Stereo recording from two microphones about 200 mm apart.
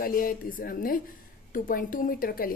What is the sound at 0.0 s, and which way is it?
A woman's voice, 45° left (ahead or behind).